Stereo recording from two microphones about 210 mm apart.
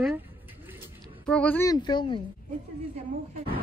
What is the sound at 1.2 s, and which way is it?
Speech, 5° left (ahead or behind).